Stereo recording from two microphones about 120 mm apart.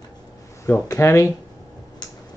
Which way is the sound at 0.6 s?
25° left (ahead or behind).